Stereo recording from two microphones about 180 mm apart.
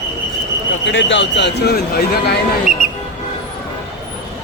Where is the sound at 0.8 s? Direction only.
90° left; by 2.0 s 60° left (ahead or behind).